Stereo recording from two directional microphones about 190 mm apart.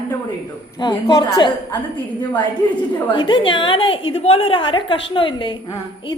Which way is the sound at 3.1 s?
25° left (ahead or behind).